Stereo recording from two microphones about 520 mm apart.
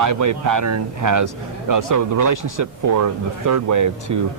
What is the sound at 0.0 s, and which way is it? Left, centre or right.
A man's voice, right.